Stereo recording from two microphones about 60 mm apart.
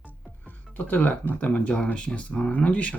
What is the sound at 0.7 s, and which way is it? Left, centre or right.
Speech, left.